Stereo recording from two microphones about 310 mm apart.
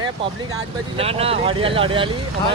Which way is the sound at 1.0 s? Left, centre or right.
Centre.